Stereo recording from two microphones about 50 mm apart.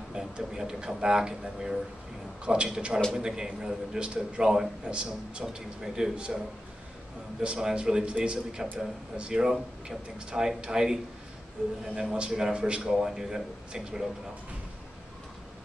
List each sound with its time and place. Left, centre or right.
0.1 s a man's voice: centre
7.5 s a man's voice: centre
12.9 s a man's voice: centre